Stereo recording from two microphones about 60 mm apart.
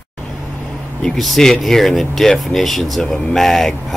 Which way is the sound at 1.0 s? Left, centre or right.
Centre.